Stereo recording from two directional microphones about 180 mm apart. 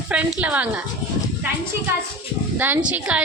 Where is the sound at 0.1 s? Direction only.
5° right (ahead or behind).